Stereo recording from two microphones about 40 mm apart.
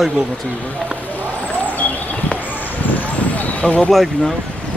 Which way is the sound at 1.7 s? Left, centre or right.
Left.